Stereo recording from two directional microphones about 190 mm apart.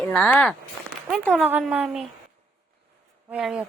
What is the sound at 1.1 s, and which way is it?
Speech, 5° right (ahead or behind).